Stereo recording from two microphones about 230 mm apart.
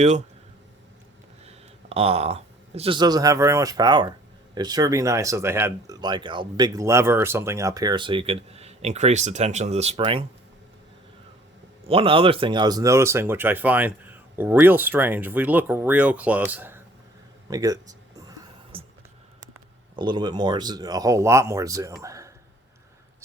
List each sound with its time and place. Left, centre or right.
1.5 s speech: right
11.9 s speech: right
18.3 s music: right
19.4 s speech: centre